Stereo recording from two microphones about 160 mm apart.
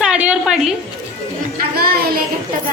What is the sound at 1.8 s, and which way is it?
Speech, 70° right (ahead or behind).